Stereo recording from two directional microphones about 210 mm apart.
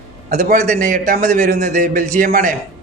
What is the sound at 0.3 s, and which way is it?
A man's voice, 45° right (ahead or behind).